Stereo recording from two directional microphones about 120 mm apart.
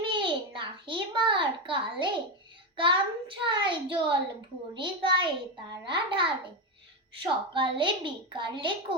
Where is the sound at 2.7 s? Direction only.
45° right (ahead or behind).